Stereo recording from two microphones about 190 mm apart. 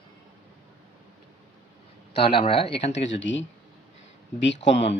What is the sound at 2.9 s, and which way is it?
Speech, 75° left (ahead or behind).